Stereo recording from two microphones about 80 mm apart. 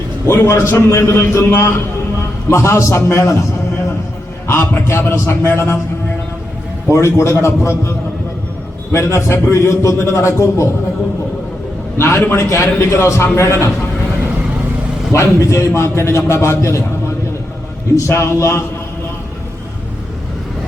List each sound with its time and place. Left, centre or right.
0.3 s a man's voice: left
4.4 s a man's voice: left
6.9 s a man's voice: left
11.9 s a man's voice: left
15.1 s a man's voice: left
17.9 s a man's voice: left